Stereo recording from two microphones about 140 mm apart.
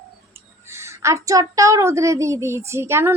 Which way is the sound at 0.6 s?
20° right (ahead or behind).